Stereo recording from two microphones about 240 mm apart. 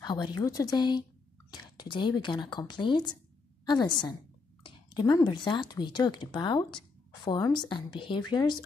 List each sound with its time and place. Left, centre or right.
0.0 s a woman's voice: centre